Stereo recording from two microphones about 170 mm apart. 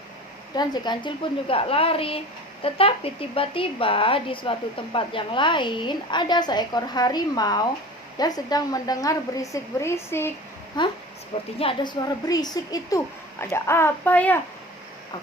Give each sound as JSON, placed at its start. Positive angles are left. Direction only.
{"t": 0.5, "sound": "a woman's voice", "side_deg": 25}
{"t": 10.8, "sound": "speech", "side_deg": 25}